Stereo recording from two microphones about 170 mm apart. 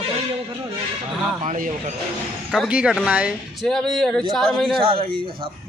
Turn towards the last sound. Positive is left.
turn(degrees=-30)  # may be behind; listen again after turning